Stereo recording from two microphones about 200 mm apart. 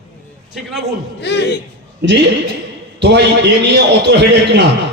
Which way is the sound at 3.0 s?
60° right (ahead or behind).